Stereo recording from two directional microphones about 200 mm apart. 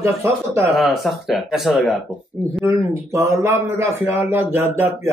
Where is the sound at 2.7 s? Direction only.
15° right (ahead or behind).